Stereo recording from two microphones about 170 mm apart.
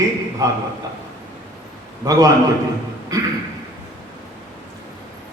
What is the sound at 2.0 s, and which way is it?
Mantra, 20° right (ahead or behind).